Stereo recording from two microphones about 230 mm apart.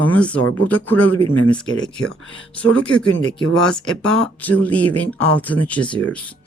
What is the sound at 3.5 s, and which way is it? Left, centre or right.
Speech, centre.